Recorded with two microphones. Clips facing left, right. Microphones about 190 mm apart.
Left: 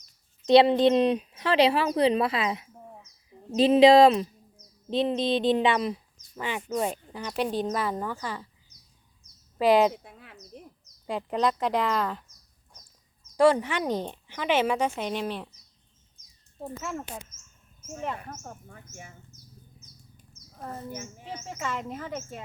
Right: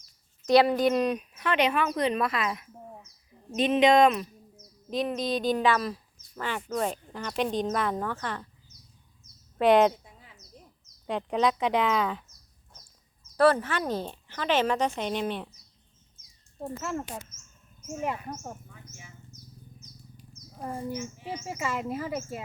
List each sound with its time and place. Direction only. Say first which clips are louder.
0.4 s speech: left 3 dB; 25° left (ahead or behind); by 8.4 s 5° left (ahead or behind)
9.6 s speech: even; centre (ahead or behind)
9.9 s a sound: left 6 dB; 70° left (ahead or behind)
10.5 s bird: left 7 dB; 80° left
11.0 s speech: right 1 dB; centre (ahead or behind)
13.3 s speech: left 1 dB; 15° left (ahead or behind)
16.6 s speech: right 2 dB; centre (ahead or behind)
20.3 s a sound: right 3 dB; 10° right (ahead or behind)
21.2 s speech: right 1 dB; 10° right (ahead or behind)